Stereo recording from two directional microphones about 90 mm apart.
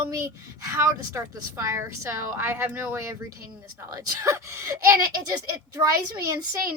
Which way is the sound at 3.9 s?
40° right (ahead or behind).